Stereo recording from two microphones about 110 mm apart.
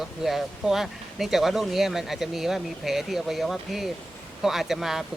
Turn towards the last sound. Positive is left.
turn(degrees=-5)  # may be behind; listen again after turning